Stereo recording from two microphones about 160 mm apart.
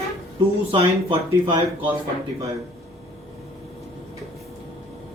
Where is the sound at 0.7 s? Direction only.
35° right (ahead or behind).